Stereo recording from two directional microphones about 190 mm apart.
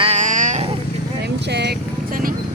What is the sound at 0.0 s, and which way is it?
Wild animals, 35° right (ahead or behind).